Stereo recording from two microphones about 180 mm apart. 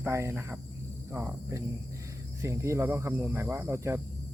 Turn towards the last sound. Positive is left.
turn(degrees=-15)  # may be behind; listen again after turning